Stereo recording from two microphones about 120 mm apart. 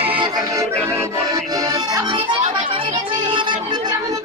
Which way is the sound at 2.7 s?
40° right (ahead or behind).